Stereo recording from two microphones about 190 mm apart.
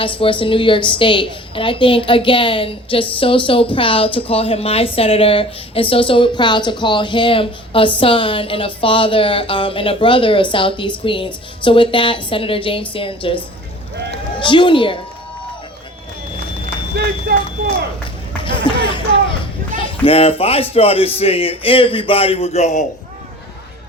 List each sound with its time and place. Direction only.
0.0 s a woman's voice: 25° left (ahead or behind)
16.9 s run: 55° right (ahead or behind)
18.4 s a sound: 25° left (ahead or behind)
19.7 s a man's voice: 30° left (ahead or behind)